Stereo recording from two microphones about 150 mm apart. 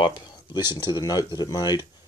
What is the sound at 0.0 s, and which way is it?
Speech, 30° left (ahead or behind).